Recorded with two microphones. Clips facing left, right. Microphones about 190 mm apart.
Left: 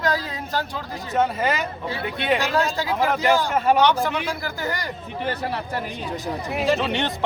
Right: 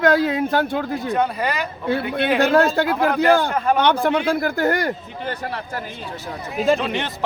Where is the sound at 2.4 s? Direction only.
55° right (ahead or behind).